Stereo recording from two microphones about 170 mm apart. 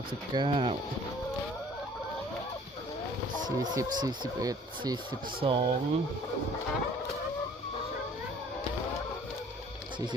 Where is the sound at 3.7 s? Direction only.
25° right (ahead or behind).